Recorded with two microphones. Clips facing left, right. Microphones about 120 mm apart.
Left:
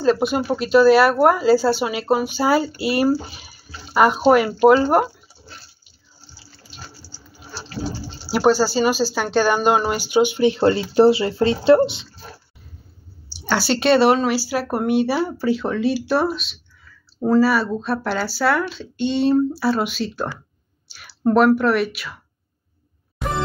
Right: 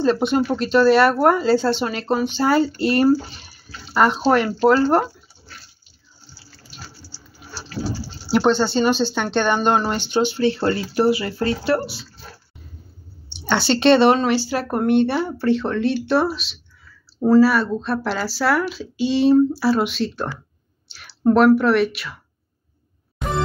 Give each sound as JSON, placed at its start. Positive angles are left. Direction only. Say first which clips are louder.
{"t": 0.0, "sound": "speech", "louder": "even", "side_deg": 5}
{"t": 7.0, "sound": "a sound", "louder": "right 1 dB", "side_deg": 30}
{"t": 8.3, "sound": "speech", "louder": "left 1 dB", "side_deg": 5}
{"t": 13.3, "sound": "speech", "louder": "right 1 dB", "side_deg": 5}